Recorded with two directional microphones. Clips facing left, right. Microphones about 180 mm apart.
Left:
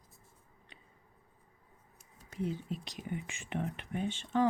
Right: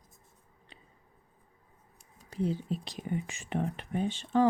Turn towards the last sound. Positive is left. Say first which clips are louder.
# right 4 dB
turn(degrees=-35)  # may be behind; listen again after turning